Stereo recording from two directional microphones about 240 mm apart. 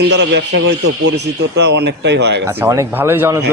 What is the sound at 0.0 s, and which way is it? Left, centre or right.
A man's voice, right.